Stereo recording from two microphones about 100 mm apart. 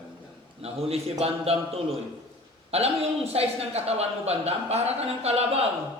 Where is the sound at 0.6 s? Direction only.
90° right.